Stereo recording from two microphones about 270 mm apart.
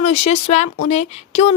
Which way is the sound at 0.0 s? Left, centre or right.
Left.